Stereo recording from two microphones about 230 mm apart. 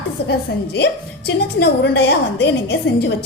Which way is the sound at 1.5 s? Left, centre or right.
Left.